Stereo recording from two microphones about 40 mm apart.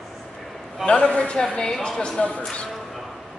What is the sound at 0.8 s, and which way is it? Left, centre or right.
A man's voice, left.